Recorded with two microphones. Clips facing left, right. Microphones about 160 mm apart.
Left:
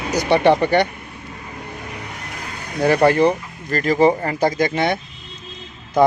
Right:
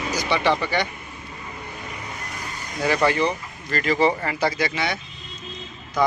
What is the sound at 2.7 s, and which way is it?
Speech, 55° left (ahead or behind).